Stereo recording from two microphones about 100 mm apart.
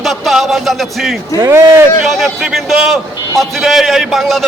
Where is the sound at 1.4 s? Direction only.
25° right (ahead or behind).